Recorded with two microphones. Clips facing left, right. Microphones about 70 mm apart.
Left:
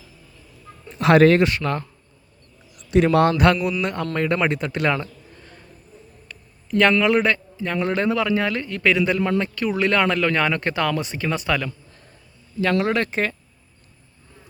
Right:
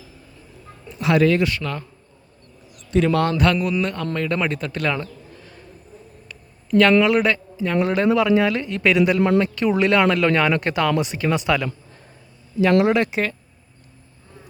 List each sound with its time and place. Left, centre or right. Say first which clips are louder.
0.9 s speech: left 4 dB; left
1.4 s speech: left 3 dB; left
3.6 s speech: right 1 dB; centre
6.2 s a sound: right 1 dB; centre
7.0 s a man's voice: right 1 dB; centre
12.8 s a man's voice: right 3 dB; centre